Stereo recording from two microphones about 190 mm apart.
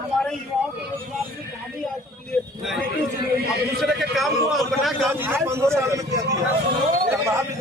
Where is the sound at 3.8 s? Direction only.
Centre (ahead or behind).